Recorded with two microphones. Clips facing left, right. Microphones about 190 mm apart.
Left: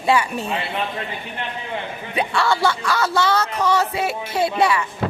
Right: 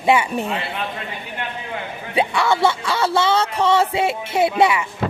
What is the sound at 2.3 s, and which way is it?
Speech, 20° right (ahead or behind).